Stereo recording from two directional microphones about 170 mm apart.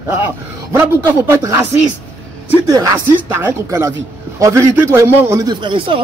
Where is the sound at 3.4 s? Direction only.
20° right (ahead or behind).